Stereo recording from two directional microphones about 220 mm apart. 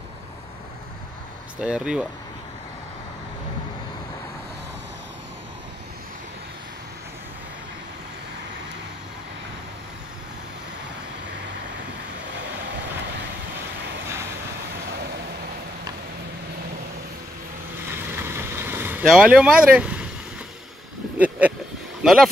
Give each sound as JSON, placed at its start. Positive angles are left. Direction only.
{"t": 1.6, "sound": "speech", "side_deg": -5}
{"t": 12.4, "sound": "vehicle", "side_deg": -55}
{"t": 17.9, "sound": "vehicle", "side_deg": -10}
{"t": 21.2, "sound": "speech", "side_deg": -5}